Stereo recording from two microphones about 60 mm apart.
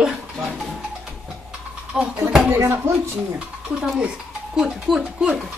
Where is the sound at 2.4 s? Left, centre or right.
Right.